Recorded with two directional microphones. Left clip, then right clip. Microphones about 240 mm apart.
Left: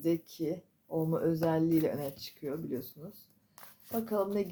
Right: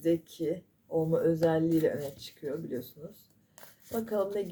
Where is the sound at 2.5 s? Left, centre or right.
Left.